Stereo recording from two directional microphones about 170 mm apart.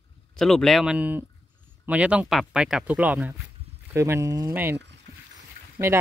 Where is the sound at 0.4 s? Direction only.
Centre (ahead or behind); by 4.7 s 15° right (ahead or behind).